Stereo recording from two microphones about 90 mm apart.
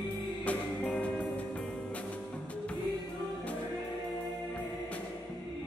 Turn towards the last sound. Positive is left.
turn(degrees=15)  # may be behind; listen again after turning